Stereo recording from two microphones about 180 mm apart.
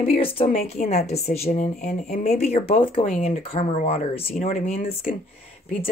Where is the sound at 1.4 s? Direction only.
50° left (ahead or behind).